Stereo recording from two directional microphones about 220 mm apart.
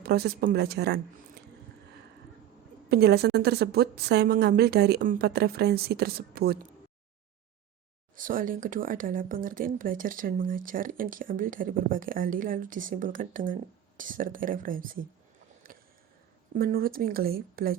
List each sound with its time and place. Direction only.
0.0 s a woman's voice: 45° right (ahead or behind)
2.9 s a woman's voice: 50° right (ahead or behind)
8.1 s speech: 40° right (ahead or behind)
15.6 s a sound: 40° right (ahead or behind)
16.6 s speech: 40° right (ahead or behind)